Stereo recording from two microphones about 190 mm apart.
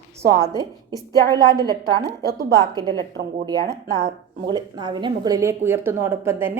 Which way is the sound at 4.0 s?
35° right (ahead or behind).